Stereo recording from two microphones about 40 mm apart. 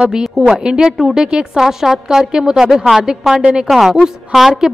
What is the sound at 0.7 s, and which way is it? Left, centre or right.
A woman's voice, centre.